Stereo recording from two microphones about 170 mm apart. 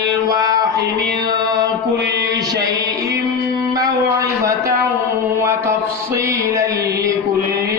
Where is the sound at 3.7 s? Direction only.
20° right (ahead or behind).